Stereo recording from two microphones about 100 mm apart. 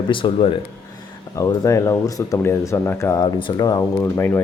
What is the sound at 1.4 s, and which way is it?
Speech, 30° left (ahead or behind).